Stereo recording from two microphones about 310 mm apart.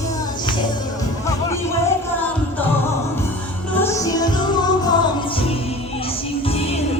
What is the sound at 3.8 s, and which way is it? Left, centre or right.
Music, centre.